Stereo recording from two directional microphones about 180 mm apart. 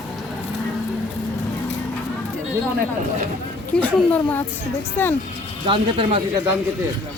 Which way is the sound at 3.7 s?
10° left (ahead or behind).